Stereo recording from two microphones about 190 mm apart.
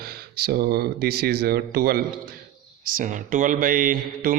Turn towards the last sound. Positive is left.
turn(degrees=-45)  # may be behind; listen again after turning